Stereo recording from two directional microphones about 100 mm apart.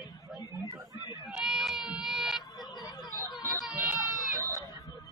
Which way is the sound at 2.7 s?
45° left (ahead or behind).